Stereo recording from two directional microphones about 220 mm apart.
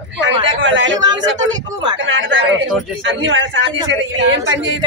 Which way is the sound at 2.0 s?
55° right (ahead or behind).